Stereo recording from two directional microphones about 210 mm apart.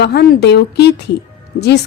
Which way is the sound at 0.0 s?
50° left (ahead or behind).